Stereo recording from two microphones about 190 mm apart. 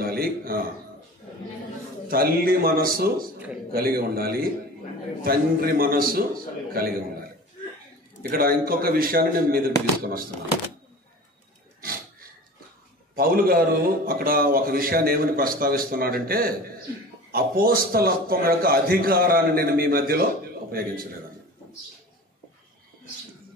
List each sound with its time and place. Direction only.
0.0 s a man's voice: 50° right (ahead or behind)
2.0 s a man's voice: 50° right (ahead or behind)
8.2 s a man's voice: 50° right (ahead or behind)
11.8 s a sound: 50° right (ahead or behind)
13.1 s a man's voice: 50° right (ahead or behind)